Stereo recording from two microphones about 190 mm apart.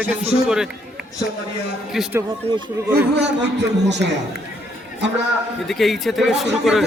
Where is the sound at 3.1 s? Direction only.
65° right (ahead or behind).